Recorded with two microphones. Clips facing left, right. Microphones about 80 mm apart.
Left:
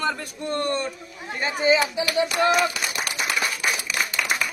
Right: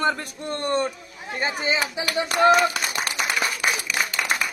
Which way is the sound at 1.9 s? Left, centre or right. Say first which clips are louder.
Left 2 dB; right.